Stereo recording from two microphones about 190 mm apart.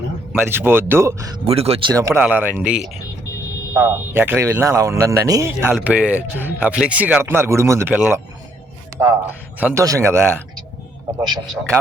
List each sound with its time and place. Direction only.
0.4 s speech: 10° right (ahead or behind)
1.5 s speech: 30° right (ahead or behind)
1.9 s speech: 15° right (ahead or behind)
11.4 s speech: centre (ahead or behind)